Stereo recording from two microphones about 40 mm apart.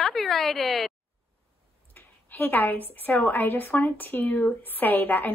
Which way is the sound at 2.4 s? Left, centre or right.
Left.